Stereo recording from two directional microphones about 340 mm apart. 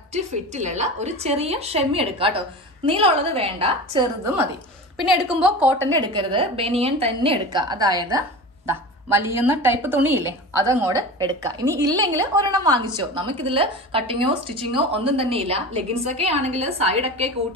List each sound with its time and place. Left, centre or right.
0.1 s a woman's voice: centre
4.9 s a woman's voice: centre
5.9 s a woman's voice: centre